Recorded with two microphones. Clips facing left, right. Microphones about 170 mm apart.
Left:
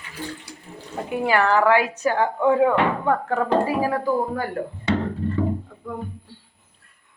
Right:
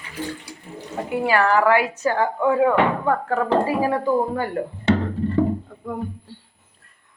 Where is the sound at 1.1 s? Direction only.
15° left (ahead or behind).